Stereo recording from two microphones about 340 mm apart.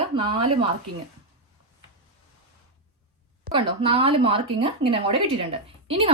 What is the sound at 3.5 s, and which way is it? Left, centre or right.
A woman's voice, centre.